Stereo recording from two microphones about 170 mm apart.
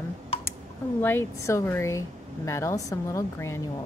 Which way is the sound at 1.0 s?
15° left (ahead or behind).